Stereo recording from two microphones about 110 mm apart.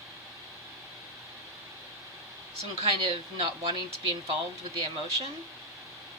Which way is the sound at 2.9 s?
50° right (ahead or behind).